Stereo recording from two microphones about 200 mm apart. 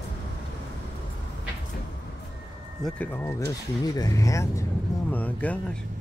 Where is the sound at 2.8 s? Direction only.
10° left (ahead or behind).